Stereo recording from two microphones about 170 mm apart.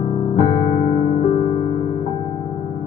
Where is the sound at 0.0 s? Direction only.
40° left (ahead or behind).